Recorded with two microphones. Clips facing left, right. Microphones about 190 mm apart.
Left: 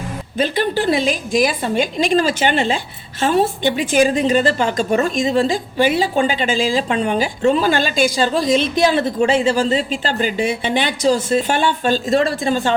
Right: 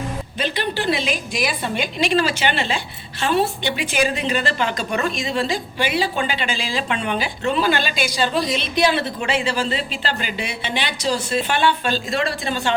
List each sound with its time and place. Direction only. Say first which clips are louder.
0.3 s speech: left 7 dB; 45° left (ahead or behind)